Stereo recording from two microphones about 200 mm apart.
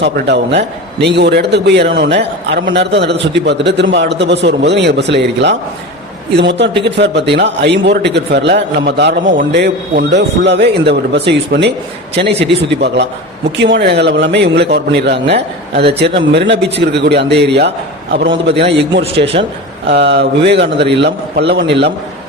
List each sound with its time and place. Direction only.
0.0 s a man's voice: 60° right (ahead or behind)
19.3 s speech: 45° right (ahead or behind)
19.9 s a man's voice: 55° right (ahead or behind)